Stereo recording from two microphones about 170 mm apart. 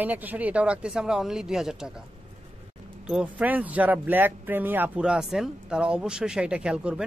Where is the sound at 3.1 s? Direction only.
5° right (ahead or behind).